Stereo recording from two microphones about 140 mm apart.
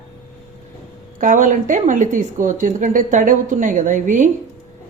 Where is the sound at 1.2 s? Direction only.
70° right (ahead or behind).